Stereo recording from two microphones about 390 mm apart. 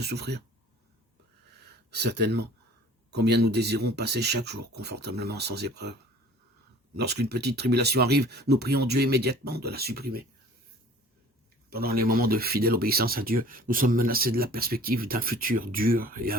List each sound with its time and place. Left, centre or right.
0.0 s speech: right
1.6 s speech: right
11.7 s speech: right